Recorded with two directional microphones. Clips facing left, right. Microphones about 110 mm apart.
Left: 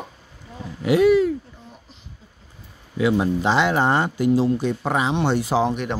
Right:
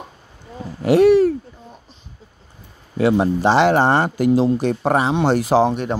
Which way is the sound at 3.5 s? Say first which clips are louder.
Right 6 dB; 60° right (ahead or behind).